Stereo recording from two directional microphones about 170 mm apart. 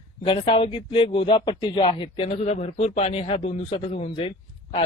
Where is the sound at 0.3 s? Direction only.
30° left (ahead or behind).